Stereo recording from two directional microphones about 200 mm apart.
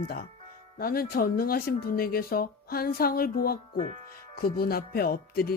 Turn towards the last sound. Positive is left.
turn(degrees=50)  # may be behind; listen again after turning